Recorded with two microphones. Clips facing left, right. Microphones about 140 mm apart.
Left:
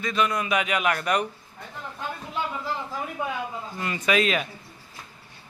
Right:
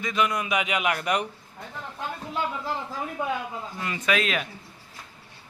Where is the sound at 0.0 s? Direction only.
15° right (ahead or behind).